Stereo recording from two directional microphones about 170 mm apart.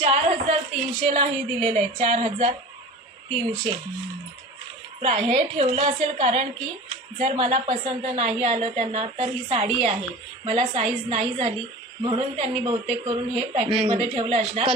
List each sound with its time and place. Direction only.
0.0 s a sound: 40° right (ahead or behind)
1.0 s a woman's voice: 35° right (ahead or behind)
5.0 s a woman's voice: 40° right (ahead or behind)